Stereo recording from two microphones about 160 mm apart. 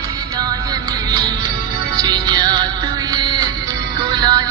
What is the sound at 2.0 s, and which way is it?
Music, 25° right (ahead or behind).